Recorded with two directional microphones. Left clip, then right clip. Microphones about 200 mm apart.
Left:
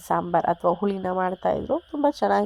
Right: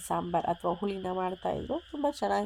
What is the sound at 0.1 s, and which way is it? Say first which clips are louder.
A woman's voice: left 8 dB; 15° left (ahead or behind).